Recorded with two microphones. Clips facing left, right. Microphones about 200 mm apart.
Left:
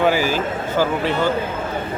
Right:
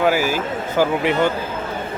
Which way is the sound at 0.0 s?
10° right (ahead or behind).